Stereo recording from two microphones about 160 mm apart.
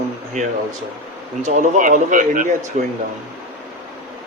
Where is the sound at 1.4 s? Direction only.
55° right (ahead or behind).